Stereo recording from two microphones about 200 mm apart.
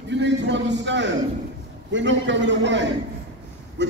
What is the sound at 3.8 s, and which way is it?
Quack, 60° right (ahead or behind).